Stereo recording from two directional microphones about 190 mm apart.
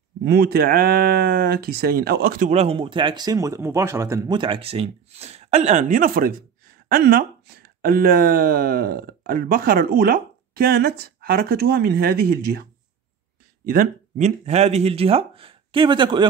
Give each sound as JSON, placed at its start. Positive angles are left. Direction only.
{"t": 0.2, "sound": "speech", "side_deg": -55}
{"t": 13.7, "sound": "speech", "side_deg": -45}